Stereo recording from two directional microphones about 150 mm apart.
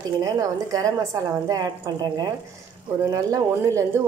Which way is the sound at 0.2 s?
25° right (ahead or behind).